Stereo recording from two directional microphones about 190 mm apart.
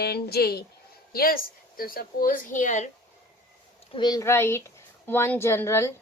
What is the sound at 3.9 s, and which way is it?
A woman's voice, 20° left (ahead or behind).